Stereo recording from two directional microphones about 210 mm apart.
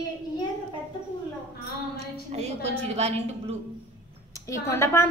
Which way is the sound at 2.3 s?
30° right (ahead or behind).